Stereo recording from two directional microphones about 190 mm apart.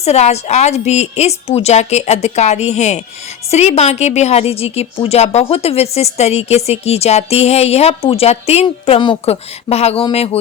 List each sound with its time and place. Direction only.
0.0 s a woman's voice: 35° left (ahead or behind)